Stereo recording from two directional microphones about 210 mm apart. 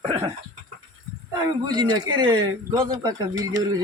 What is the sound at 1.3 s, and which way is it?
Speech, 20° right (ahead or behind).